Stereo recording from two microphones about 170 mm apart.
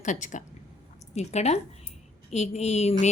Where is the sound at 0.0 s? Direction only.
45° left (ahead or behind).